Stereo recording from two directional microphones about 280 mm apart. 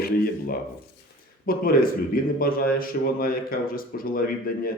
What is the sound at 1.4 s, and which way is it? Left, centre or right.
A man's voice, left.